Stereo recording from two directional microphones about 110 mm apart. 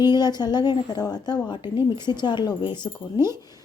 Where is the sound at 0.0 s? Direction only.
40° left (ahead or behind).